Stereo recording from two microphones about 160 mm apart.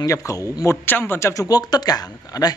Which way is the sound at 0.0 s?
20° left (ahead or behind).